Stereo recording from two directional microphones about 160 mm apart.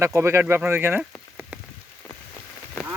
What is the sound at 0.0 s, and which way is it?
Speech, 15° right (ahead or behind).